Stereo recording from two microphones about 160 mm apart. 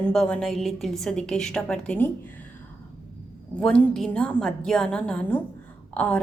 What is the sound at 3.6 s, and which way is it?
A woman's voice, 5° left (ahead or behind).